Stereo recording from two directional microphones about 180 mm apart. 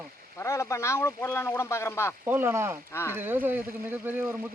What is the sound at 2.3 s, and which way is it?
Speech, 10° right (ahead or behind).